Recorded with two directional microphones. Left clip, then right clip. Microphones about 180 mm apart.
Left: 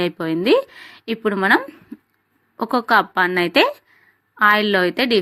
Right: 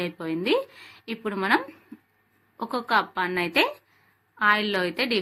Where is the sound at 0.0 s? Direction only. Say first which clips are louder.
Left 8 dB; 40° left (ahead or behind).